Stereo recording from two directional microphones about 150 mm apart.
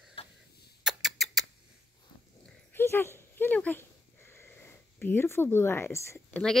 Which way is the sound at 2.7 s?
15° left (ahead or behind).